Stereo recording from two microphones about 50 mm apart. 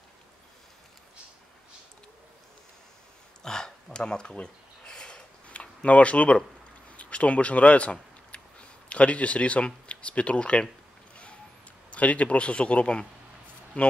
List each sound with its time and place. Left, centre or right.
3.4 s a sound: centre
7.0 s speech: left
11.9 s speech: left